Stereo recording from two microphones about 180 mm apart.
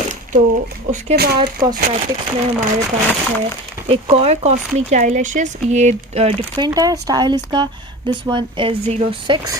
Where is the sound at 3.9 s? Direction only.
35° right (ahead or behind).